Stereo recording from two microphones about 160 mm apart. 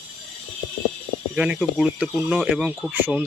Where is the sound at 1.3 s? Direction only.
5° right (ahead or behind).